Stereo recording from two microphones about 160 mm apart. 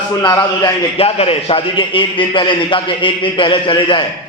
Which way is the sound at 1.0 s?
40° left (ahead or behind).